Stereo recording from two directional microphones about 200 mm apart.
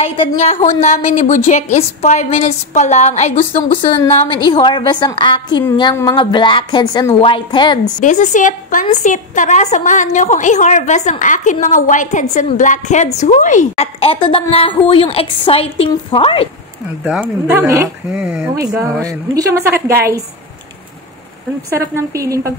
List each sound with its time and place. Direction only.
0.4 s a woman's voice: 35° left (ahead or behind)
8.0 s a woman's voice: 40° left (ahead or behind)
17.0 s a woman's voice: 5° right (ahead or behind)
18.1 s speech: 5° right (ahead or behind)
18.8 s a woman's voice: 15° right (ahead or behind)
21.7 s a woman's voice: 15° right (ahead or behind)